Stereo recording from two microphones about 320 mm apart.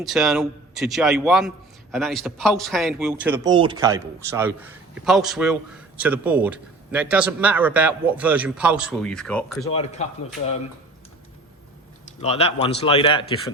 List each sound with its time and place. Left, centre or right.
0.0 s a man's voice: centre
9.7 s a man's voice: centre
12.2 s a man's voice: centre